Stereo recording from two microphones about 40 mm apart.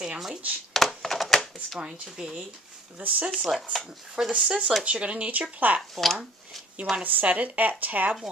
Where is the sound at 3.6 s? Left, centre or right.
Centre.